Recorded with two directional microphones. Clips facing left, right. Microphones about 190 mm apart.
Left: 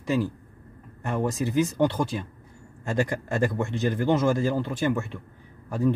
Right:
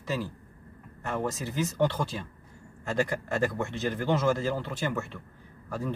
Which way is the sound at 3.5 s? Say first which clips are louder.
Left 4 dB; 15° left (ahead or behind).